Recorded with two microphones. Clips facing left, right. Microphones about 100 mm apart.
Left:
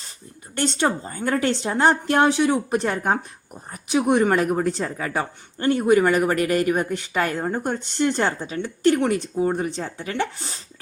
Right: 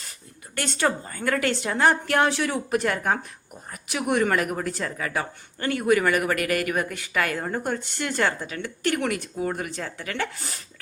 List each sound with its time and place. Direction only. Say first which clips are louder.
0.5 s a woman's voice: left 3 dB; 25° left (ahead or behind)